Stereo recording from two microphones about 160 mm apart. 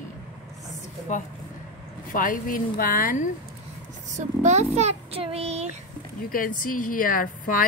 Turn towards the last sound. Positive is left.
turn(degrees=60)  # may be behind; listen again after turning